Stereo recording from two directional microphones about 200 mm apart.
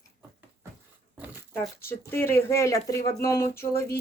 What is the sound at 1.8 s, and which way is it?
Speech, 10° left (ahead or behind).